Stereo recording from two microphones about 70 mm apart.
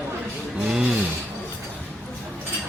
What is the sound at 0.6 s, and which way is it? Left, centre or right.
Speech, centre.